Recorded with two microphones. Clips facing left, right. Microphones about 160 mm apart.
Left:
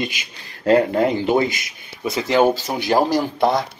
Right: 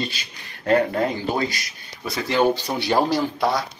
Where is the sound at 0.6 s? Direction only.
25° left (ahead or behind).